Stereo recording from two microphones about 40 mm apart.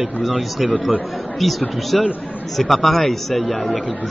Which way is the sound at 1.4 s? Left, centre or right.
Centre.